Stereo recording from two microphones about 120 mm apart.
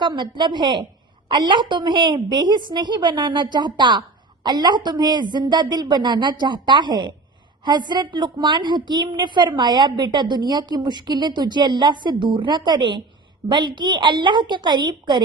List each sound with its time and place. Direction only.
0.0 s a woman's voice: 40° right (ahead or behind)